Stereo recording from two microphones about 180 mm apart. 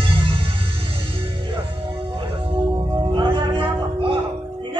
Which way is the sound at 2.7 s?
25° right (ahead or behind).